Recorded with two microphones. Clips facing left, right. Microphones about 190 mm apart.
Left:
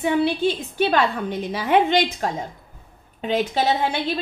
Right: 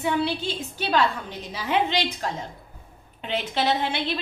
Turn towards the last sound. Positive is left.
turn(degrees=40)  # may be behind; listen again after turning